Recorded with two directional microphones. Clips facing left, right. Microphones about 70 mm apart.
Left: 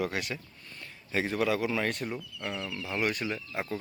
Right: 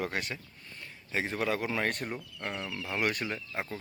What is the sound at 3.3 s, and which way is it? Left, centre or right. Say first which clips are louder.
Speech: left 1 dB; centre.